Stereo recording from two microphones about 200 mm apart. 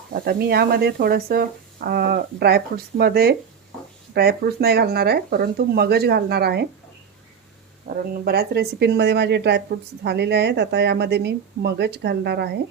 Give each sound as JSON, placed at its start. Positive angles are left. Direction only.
{"t": 0.1, "sound": "speech", "side_deg": -50}
{"t": 7.9, "sound": "a woman's voice", "side_deg": -45}